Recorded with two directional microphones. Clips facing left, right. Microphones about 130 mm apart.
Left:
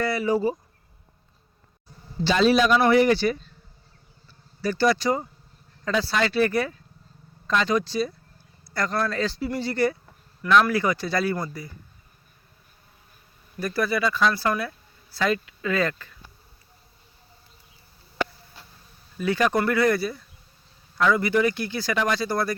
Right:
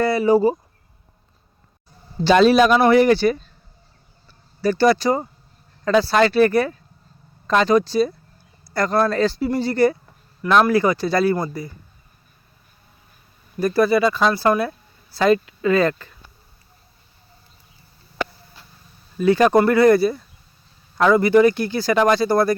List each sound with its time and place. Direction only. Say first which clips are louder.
0.0 s speech: right 7 dB; 30° right (ahead or behind)
2.3 s a man's voice: right 6 dB; 55° right (ahead or behind)
2.7 s speech: right 4 dB; 45° right (ahead or behind)
4.6 s speech: right 5 dB; 40° right (ahead or behind)
6.1 s speech: right 6 dB; 50° right (ahead or behind); by 11.7 s 30° right (ahead or behind)
13.6 s speech: right 8 dB; 30° right (ahead or behind)
19.1 s speech: right 8 dB; 35° right (ahead or behind)